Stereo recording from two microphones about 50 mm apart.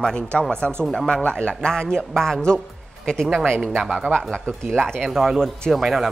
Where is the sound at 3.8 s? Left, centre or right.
Centre.